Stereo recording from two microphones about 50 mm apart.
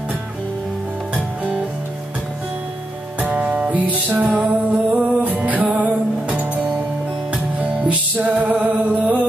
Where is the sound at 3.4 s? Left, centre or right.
Right.